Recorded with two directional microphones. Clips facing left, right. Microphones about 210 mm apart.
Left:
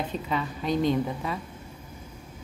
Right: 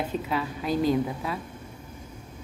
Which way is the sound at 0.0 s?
5° right (ahead or behind).